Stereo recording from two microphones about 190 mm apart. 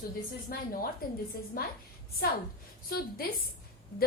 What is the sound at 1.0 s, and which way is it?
Speech, 50° left (ahead or behind).